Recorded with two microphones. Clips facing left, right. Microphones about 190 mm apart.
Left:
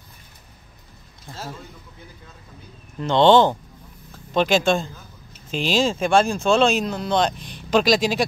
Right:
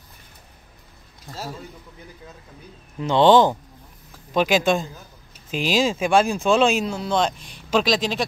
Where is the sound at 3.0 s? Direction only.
5° right (ahead or behind).